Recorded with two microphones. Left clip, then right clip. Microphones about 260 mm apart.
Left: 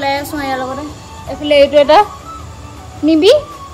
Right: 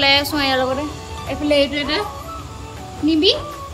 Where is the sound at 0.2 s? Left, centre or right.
Centre.